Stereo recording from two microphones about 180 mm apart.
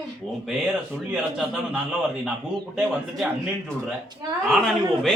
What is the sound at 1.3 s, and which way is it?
Speech, centre (ahead or behind).